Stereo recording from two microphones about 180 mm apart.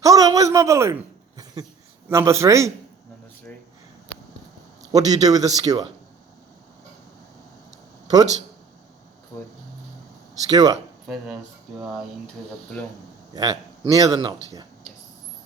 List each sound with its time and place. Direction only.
0.0 s speech: 20° right (ahead or behind)
2.0 s a man's voice: 15° right (ahead or behind)
4.9 s a man's voice: 20° right (ahead or behind)
10.5 s a man's voice: 20° right (ahead or behind)
11.0 s speech: centre (ahead or behind)
13.3 s speech: 20° right (ahead or behind)